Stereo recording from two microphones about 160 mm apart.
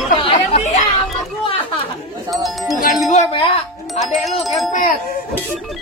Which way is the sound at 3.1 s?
35° left (ahead or behind).